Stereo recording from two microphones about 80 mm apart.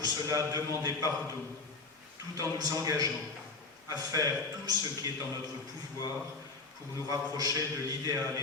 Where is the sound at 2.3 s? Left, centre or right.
Right.